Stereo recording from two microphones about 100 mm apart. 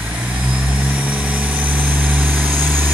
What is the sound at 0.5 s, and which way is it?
Vehicle, 15° right (ahead or behind).